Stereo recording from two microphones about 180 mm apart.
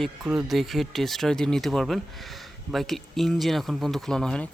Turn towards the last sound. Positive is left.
turn(degrees=5)  # may be behind; listen again after turning